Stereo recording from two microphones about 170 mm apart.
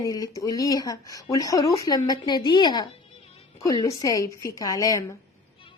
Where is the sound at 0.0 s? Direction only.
20° left (ahead or behind).